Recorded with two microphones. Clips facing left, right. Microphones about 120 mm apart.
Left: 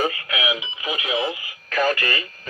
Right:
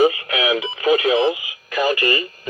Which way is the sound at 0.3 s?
40° right (ahead or behind).